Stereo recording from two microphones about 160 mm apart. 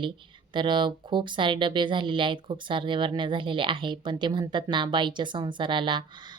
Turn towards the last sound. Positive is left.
turn(degrees=-30)  # may be behind; listen again after turning